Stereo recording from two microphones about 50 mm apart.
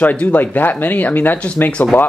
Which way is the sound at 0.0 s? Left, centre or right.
Left.